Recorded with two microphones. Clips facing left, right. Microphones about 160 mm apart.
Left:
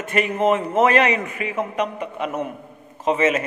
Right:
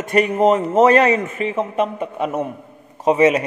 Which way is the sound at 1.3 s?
25° right (ahead or behind).